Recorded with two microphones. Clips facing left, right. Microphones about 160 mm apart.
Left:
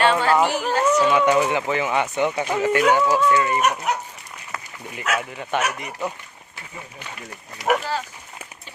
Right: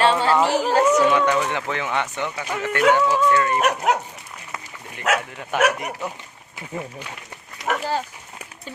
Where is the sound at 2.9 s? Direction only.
10° left (ahead or behind).